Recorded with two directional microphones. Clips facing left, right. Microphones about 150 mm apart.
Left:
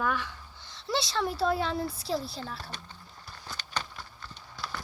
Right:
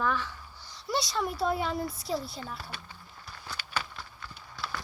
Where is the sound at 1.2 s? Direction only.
30° left (ahead or behind).